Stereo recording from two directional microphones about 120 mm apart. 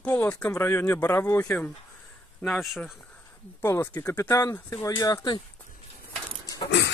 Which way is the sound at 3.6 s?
20° left (ahead or behind).